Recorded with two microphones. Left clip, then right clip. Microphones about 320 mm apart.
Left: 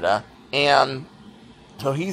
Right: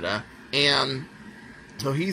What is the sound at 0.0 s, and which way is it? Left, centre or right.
Speech, centre.